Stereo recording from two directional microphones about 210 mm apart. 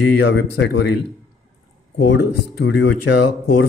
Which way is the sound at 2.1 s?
55° left (ahead or behind).